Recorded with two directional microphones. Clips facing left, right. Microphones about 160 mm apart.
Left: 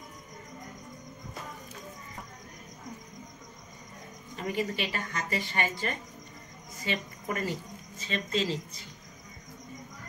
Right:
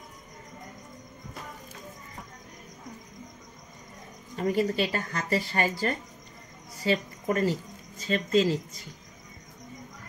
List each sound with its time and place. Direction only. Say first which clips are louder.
4.4 s a woman's voice: right 6 dB; 40° right (ahead or behind)